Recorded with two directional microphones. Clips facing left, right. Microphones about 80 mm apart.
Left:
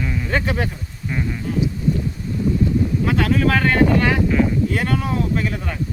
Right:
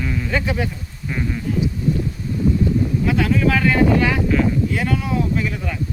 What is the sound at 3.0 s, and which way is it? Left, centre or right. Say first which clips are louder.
Speech: right 1 dB; left.